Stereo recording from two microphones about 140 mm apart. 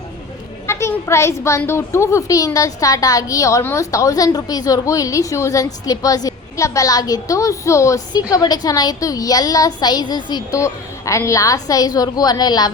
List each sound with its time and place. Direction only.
0.7 s a woman's voice: 20° left (ahead or behind)